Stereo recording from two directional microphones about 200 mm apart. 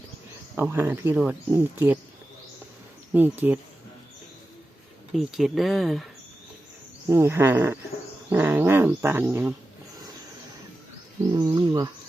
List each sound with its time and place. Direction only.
0.5 s speech: 10° right (ahead or behind)
3.1 s speech: 10° right (ahead or behind)
5.1 s speech: centre (ahead or behind)
7.1 s speech: 10° right (ahead or behind)
11.4 s a sound: 20° right (ahead or behind)